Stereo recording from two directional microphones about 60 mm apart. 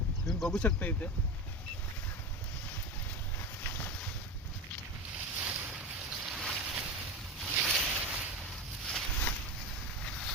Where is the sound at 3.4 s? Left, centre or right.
Left.